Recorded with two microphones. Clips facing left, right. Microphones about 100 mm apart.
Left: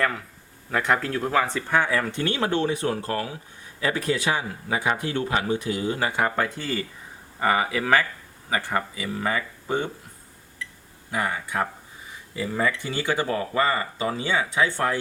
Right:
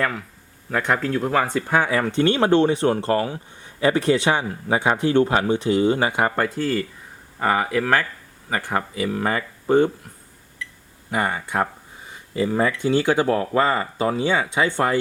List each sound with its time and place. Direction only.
0.0 s speech: centre (ahead or behind)
1.5 s speech: 15° right (ahead or behind)
2.0 s speech: 25° right (ahead or behind)
5.5 s speech: 25° right (ahead or behind)
6.1 s speech: 15° right (ahead or behind)
6.3 s speech: centre (ahead or behind)
9.0 s speech: 50° right (ahead or behind)
11.1 s speech: 60° right (ahead or behind)
12.3 s speech: 45° right (ahead or behind)